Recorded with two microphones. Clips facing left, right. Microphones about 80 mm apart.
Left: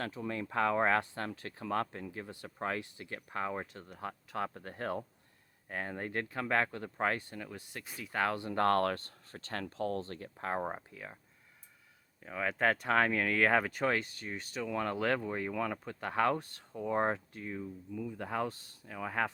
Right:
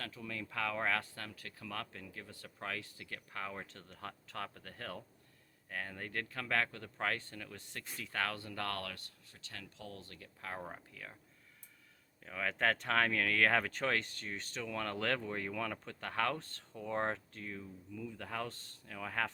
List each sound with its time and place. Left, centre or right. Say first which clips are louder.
0.0 s speech: left 7 dB; left
10.9 s speech: left 4 dB; left
12.2 s speech: left 3 dB; centre